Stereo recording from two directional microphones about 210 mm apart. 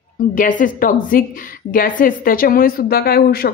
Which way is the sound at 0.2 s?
40° left (ahead or behind).